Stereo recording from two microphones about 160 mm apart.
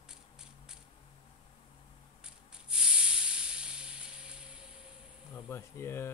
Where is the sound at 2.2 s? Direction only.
5° right (ahead or behind).